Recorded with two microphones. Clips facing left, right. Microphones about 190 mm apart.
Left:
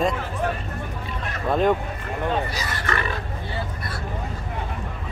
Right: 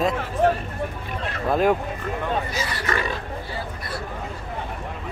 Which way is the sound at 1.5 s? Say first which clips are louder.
Even; 5° right (ahead or behind).